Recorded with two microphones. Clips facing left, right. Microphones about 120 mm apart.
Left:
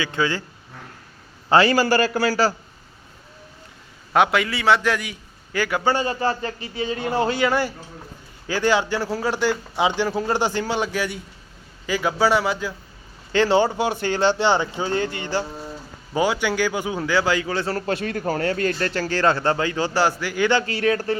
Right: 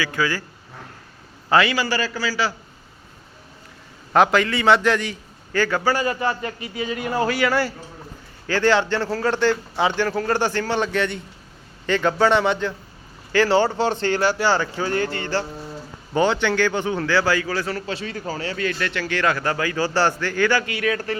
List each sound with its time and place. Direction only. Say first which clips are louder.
0.0 s speech: even; 25° left (ahead or behind)
1.5 s a man's voice: left 2 dB; 30° left (ahead or behind)
1.7 s a man's voice: left 5 dB; 45° left (ahead or behind)
4.1 s a man's voice: right 2 dB; centre (ahead or behind)
5.8 s a man's voice: even; 25° left (ahead or behind); by 12.7 s 5° left (ahead or behind)
13.3 s speech: even; 20° left (ahead or behind)
17.7 s a man's voice: left 3 dB; 45° left (ahead or behind); by 20.7 s 20° left (ahead or behind)
20.7 s a man's voice: left 3 dB; 30° left (ahead or behind)